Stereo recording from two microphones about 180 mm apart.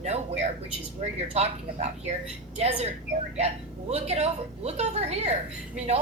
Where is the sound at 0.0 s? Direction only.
35° right (ahead or behind).